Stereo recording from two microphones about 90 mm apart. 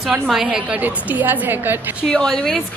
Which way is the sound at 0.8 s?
20° right (ahead or behind).